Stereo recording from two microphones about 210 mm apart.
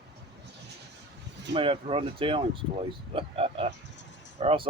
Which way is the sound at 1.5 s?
25° right (ahead or behind).